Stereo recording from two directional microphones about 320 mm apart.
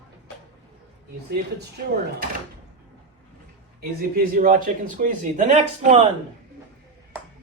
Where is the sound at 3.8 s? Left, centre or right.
Right.